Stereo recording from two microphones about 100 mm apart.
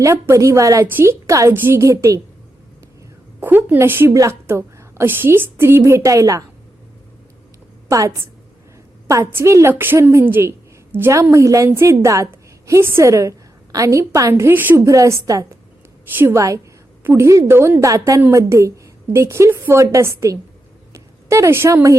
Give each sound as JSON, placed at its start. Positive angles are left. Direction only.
{"t": 0.0, "sound": "a woman's voice", "side_deg": -30}
{"t": 0.9, "sound": "a woman's voice", "side_deg": -20}
{"t": 1.3, "sound": "a woman's voice", "side_deg": -30}
{"t": 3.4, "sound": "a woman's voice", "side_deg": -20}
{"t": 7.9, "sound": "a woman's voice", "side_deg": -30}
{"t": 14.8, "sound": "a woman's voice", "side_deg": -30}